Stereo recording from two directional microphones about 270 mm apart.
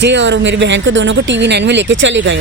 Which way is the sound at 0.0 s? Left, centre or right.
Right.